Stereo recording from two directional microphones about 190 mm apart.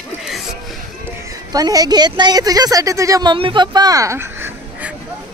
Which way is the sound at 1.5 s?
20° right (ahead or behind).